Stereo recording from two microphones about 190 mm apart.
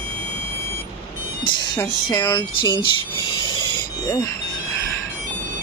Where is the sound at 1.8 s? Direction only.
20° left (ahead or behind).